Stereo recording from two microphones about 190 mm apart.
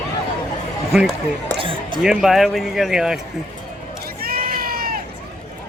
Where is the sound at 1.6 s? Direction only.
25° right (ahead or behind).